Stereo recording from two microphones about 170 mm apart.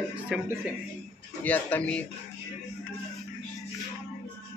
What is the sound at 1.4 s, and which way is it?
Speech, 10° left (ahead or behind).